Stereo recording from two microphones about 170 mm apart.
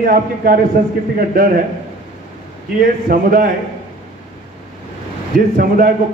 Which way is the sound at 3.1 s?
55° right (ahead or behind).